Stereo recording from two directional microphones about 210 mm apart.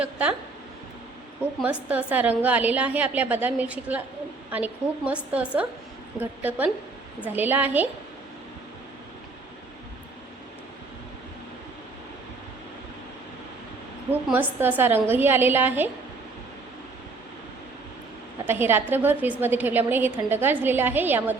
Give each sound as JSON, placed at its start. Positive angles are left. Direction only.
{"t": 0.0, "sound": "speech", "side_deg": -5}
{"t": 1.6, "sound": "a woman's voice", "side_deg": -5}
{"t": 14.1, "sound": "a woman's voice", "side_deg": -10}
{"t": 18.4, "sound": "a woman's voice", "side_deg": -10}